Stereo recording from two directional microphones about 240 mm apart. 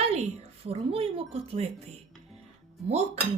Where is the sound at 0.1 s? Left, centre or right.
Right.